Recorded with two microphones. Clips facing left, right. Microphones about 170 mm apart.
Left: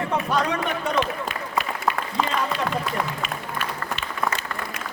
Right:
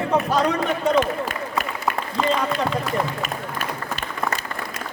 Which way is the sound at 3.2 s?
45° right (ahead or behind).